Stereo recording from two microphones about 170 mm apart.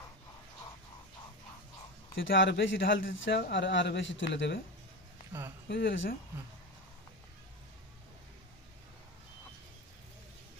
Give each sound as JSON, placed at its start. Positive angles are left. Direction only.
{"t": 2.1, "sound": "a man's voice", "side_deg": 90}
{"t": 5.3, "sound": "speech", "side_deg": -15}
{"t": 5.6, "sound": "a man's voice", "side_deg": 90}